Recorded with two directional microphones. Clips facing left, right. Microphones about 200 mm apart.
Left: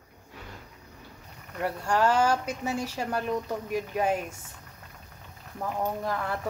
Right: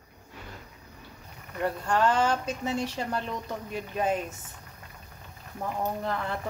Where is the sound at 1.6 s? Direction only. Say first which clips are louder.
Even; 10° left (ahead or behind).